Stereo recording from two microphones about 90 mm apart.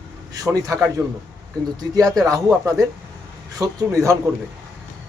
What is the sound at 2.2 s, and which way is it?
Speech, 40° right (ahead or behind).